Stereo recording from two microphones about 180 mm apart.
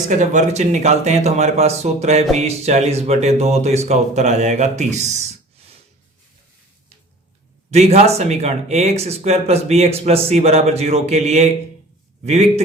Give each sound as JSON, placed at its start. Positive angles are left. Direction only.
{"t": 0.1, "sound": "a man's voice", "side_deg": -40}
{"t": 7.7, "sound": "a man's voice", "side_deg": -35}